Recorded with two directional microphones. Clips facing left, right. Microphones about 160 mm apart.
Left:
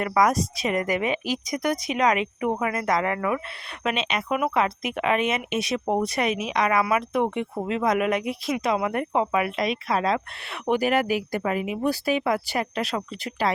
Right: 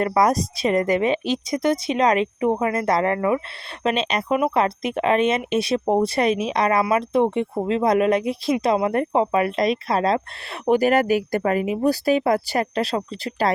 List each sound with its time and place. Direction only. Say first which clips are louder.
0.0 s a woman's voice: right 3 dB; 35° right (ahead or behind)